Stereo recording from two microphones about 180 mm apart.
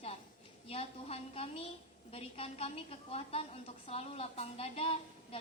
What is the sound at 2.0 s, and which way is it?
A woman's voice, 30° left (ahead or behind).